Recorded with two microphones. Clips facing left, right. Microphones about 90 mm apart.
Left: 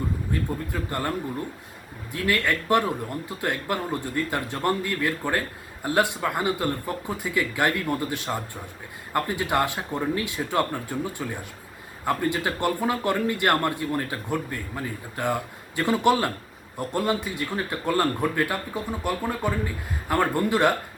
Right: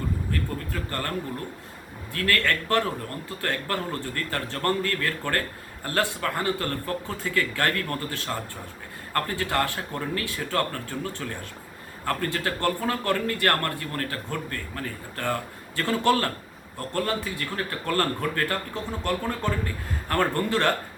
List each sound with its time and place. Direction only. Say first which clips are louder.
0.3 s speech: left 2 dB; 15° left (ahead or behind)
2.1 s a man's voice: left 1 dB; 15° left (ahead or behind)